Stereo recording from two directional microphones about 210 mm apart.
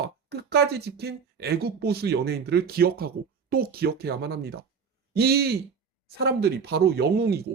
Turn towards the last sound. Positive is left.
turn(degrees=-50)  # may be behind; listen again after turning